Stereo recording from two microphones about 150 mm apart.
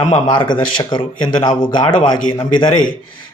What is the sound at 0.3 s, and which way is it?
Speech, 30° left (ahead or behind).